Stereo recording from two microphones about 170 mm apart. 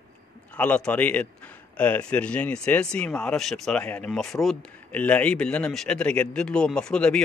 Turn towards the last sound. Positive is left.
turn(degrees=5)  # may be behind; listen again after turning